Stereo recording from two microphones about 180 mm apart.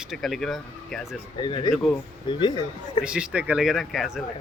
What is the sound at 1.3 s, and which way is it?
Speech, 25° left (ahead or behind).